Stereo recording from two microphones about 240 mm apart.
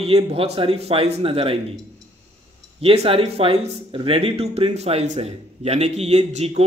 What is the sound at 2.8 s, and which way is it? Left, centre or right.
Speech, right.